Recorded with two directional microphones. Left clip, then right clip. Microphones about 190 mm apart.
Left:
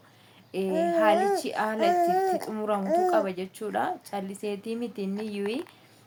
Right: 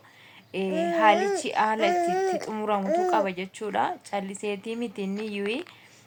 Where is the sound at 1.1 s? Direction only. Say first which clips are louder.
Left 1 dB; 30° left (ahead or behind).